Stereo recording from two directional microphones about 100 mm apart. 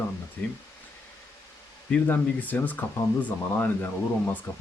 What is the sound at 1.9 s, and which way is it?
Speech, 20° left (ahead or behind).